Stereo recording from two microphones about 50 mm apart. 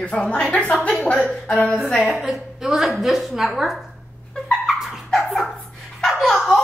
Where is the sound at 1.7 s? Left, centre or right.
Left.